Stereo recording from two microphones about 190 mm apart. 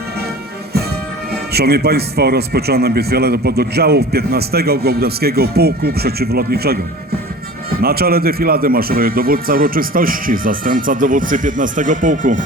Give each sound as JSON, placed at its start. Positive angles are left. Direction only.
{"t": 1.5, "sound": "a man's voice", "side_deg": -55}
{"t": 7.8, "sound": "a man's voice", "side_deg": -55}